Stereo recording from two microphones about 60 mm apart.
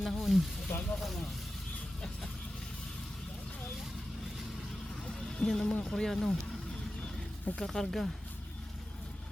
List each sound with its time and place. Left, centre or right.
0.0 s speech: centre
0.7 s speech: left
5.0 s a sound: centre
5.8 s speech: centre
7.6 s speech: centre